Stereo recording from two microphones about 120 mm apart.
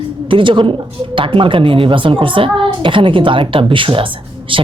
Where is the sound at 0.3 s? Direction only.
45° right (ahead or behind).